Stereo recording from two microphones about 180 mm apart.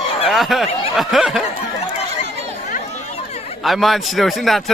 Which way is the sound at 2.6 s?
45° left (ahead or behind).